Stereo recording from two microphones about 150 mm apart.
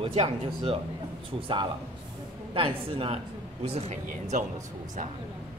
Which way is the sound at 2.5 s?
35° right (ahead or behind).